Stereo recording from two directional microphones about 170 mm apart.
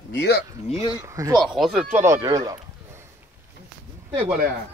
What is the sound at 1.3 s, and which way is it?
Speech, centre (ahead or behind).